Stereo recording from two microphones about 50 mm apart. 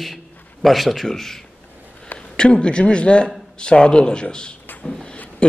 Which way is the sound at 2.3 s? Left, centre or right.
Centre.